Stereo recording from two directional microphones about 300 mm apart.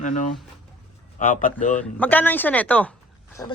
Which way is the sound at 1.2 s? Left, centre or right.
Left.